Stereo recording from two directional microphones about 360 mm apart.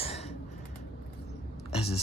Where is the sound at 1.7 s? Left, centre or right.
Centre.